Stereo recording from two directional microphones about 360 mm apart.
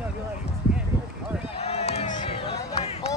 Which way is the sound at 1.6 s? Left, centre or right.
Centre.